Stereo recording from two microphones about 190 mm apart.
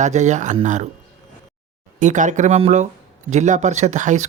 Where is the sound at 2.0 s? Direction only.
40° right (ahead or behind).